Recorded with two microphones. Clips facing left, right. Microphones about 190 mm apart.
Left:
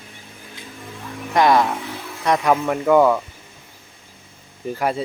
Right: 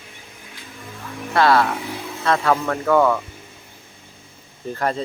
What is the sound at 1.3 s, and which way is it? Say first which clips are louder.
Speech: left 1 dB; 15° left (ahead or behind).